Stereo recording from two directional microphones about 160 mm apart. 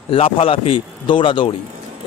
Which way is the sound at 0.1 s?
35° left (ahead or behind).